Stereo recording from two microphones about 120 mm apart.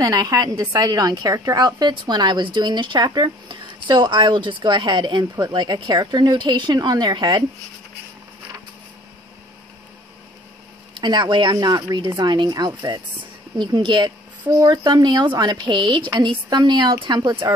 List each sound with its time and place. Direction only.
0.0 s a woman's voice: 30° right (ahead or behind)
11.0 s a woman's voice: 40° right (ahead or behind)